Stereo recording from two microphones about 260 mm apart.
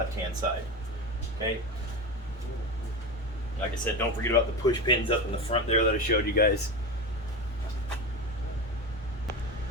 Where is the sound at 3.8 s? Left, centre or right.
Centre.